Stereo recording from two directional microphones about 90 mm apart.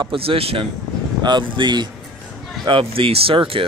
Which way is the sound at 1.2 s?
55° right (ahead or behind).